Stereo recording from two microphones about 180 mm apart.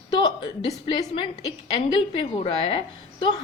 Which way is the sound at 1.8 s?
30° left (ahead or behind).